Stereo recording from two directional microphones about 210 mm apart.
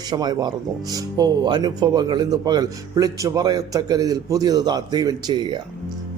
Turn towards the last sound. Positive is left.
turn(degrees=-20)  # may be behind; listen again after turning